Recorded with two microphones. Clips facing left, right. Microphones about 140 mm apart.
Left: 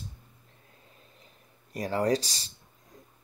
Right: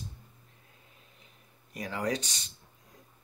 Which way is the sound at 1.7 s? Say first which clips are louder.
Left 6 dB; 35° left (ahead or behind).